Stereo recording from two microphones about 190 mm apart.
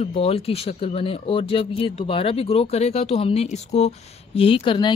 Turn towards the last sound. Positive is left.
turn(degrees=25)  # may be behind; listen again after turning